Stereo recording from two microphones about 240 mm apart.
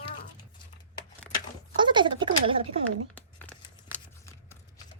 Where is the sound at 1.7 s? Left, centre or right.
Centre.